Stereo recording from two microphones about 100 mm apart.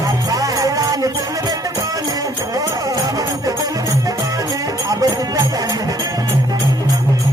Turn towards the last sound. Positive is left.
turn(degrees=-35)  # may be behind; listen again after turning